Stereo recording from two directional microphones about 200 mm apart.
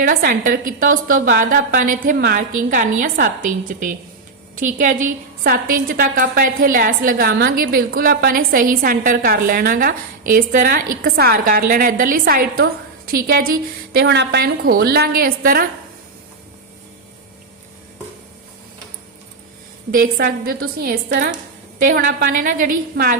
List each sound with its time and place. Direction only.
0.0 s a woman's voice: 45° right (ahead or behind)
19.9 s a woman's voice: 50° right (ahead or behind)
21.8 s a woman's voice: 45° right (ahead or behind)